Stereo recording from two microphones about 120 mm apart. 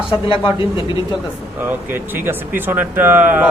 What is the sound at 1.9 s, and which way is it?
Speech, 15° right (ahead or behind).